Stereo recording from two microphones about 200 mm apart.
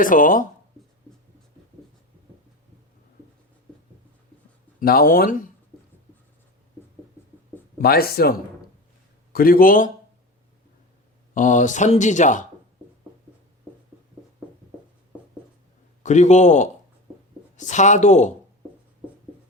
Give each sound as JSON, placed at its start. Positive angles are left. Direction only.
{"t": 0.0, "sound": "speech", "side_deg": 45}
{"t": 4.8, "sound": "speech", "side_deg": 45}
{"t": 7.8, "sound": "speech", "side_deg": 50}
{"t": 11.3, "sound": "speech", "side_deg": 40}
{"t": 16.0, "sound": "speech", "side_deg": 35}